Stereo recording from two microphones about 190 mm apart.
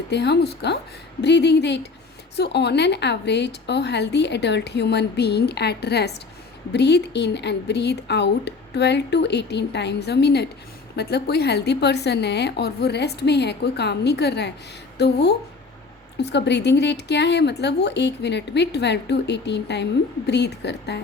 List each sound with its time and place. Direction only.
0.1 s speech: 60° left (ahead or behind)